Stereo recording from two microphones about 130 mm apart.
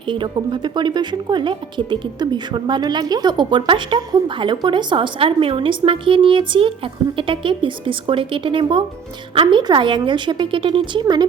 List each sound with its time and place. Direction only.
0.1 s a woman's voice: 40° right (ahead or behind)